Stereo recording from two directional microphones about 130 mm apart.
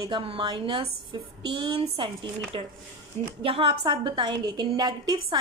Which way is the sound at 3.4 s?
45° right (ahead or behind).